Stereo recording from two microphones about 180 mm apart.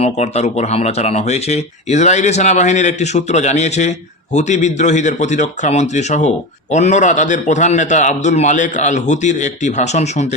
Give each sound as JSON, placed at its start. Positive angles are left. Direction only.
{"t": 0.0, "sound": "speech", "side_deg": 40}